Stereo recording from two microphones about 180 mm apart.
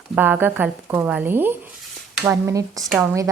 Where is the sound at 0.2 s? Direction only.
10° right (ahead or behind).